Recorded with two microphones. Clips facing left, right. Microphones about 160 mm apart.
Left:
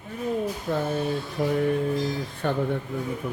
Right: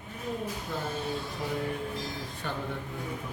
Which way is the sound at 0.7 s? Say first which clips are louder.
Left 8 dB; 65° left (ahead or behind).